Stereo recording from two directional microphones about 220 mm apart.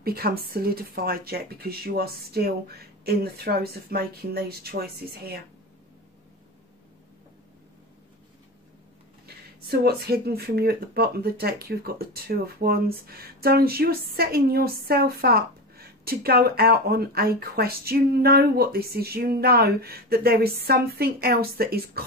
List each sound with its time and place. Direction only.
0.0 s speech: 45° right (ahead or behind)
9.7 s speech: 45° right (ahead or behind)